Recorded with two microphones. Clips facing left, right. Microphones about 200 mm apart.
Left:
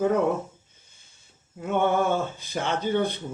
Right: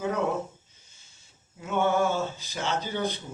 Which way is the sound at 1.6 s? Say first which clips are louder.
Left 2 dB; 55° left (ahead or behind).